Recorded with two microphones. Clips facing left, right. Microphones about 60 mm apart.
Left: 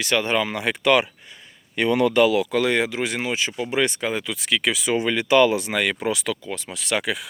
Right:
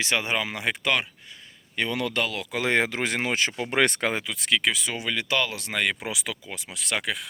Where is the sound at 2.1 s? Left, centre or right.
Centre.